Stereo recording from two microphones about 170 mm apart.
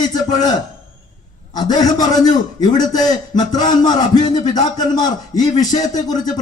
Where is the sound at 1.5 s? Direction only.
25° left (ahead or behind).